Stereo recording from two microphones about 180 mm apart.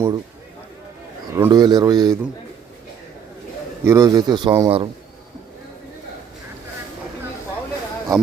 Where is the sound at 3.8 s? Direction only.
20° right (ahead or behind).